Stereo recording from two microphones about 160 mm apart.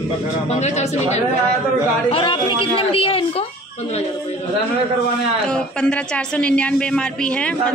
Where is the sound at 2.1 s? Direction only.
35° left (ahead or behind).